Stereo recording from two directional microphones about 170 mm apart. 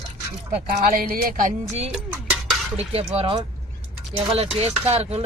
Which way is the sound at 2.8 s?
35° right (ahead or behind).